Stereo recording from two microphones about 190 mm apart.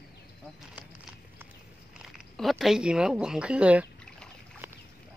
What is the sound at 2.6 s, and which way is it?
Speech, 5° right (ahead or behind).